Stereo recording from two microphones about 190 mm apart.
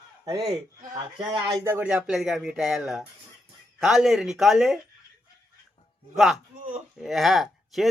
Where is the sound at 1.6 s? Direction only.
10° right (ahead or behind).